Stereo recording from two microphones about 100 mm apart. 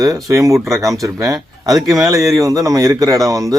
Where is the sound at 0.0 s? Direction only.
35° right (ahead or behind).